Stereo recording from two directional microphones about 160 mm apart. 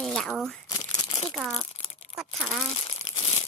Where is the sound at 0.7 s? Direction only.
20° left (ahead or behind).